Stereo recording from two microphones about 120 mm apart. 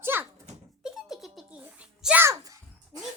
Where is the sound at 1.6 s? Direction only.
10° right (ahead or behind).